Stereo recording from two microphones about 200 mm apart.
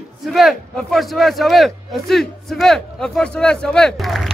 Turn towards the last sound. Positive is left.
turn(degrees=0)  # may be behind; listen again after turning